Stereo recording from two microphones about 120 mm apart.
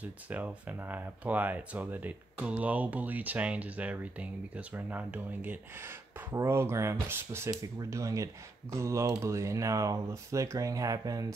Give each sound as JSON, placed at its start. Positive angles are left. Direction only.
{"t": 0.0, "sound": "speech", "side_deg": -15}